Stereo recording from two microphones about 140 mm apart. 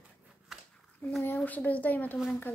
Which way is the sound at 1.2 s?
15° left (ahead or behind).